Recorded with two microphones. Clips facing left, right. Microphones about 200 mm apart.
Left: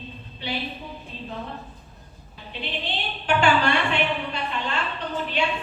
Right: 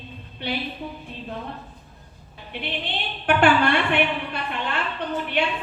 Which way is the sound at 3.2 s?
55° right (ahead or behind).